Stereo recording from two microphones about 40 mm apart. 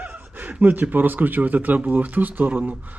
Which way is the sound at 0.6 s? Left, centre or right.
Right.